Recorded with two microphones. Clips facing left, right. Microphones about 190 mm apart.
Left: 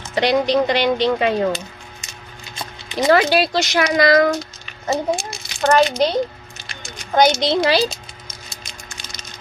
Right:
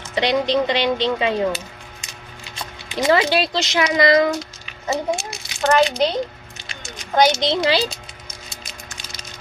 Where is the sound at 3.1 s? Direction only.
25° right (ahead or behind).